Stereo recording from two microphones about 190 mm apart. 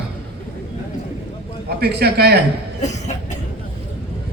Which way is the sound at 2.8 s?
35° left (ahead or behind).